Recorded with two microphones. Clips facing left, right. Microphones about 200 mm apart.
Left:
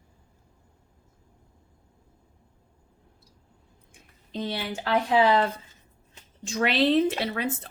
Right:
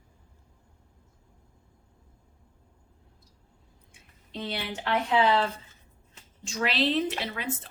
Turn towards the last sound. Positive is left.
turn(degrees=40)  # may be behind; listen again after turning